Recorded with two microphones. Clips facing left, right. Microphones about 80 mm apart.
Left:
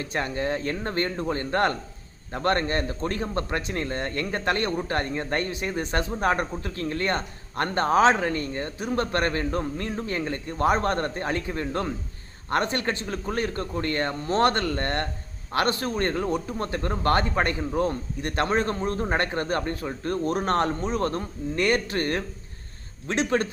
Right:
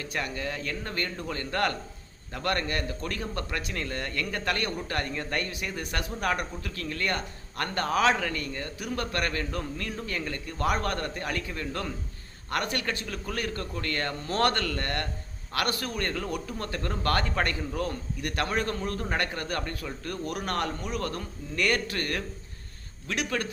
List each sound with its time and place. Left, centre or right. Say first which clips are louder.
0.0 s a man's voice: left 5 dB; left